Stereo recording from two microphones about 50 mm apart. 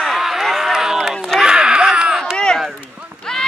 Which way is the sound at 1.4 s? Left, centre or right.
Centre.